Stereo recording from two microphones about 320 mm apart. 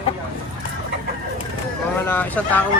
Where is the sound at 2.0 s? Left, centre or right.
Centre.